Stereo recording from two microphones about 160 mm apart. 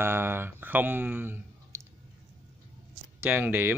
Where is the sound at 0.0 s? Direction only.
15° right (ahead or behind).